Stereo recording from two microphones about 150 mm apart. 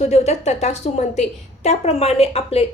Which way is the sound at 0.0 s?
45° left (ahead or behind).